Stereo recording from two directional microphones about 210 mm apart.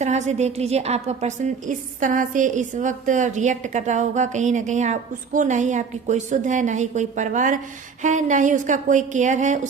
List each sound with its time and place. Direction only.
0.0 s a woman's voice: 35° right (ahead or behind)